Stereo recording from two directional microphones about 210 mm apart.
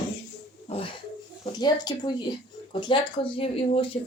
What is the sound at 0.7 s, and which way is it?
Speech, 25° left (ahead or behind).